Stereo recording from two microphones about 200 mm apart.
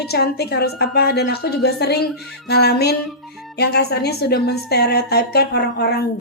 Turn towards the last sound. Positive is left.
turn(degrees=55)  # may be behind; listen again after turning